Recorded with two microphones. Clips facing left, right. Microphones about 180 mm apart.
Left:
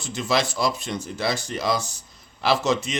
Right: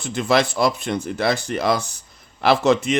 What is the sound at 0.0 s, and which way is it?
Speech, 60° right (ahead or behind).